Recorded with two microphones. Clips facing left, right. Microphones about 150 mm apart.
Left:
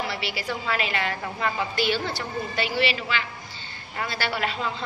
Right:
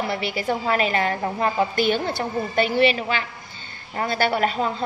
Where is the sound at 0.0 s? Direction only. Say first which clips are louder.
Right 5 dB; 50° right (ahead or behind).